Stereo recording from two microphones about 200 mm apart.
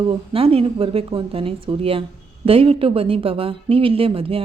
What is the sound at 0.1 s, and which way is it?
A woman's voice, 30° right (ahead or behind).